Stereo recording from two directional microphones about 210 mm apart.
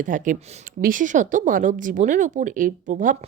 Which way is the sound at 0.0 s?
40° right (ahead or behind).